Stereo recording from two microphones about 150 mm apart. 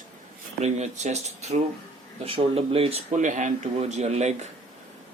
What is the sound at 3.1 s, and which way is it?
Speech, 55° right (ahead or behind).